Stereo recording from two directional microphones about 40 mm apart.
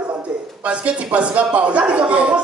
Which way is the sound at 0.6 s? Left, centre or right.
Right.